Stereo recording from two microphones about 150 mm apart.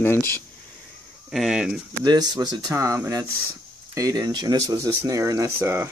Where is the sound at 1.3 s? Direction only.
5° right (ahead or behind).